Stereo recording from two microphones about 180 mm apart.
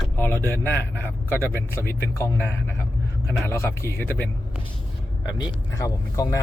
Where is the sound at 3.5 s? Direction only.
15° left (ahead or behind).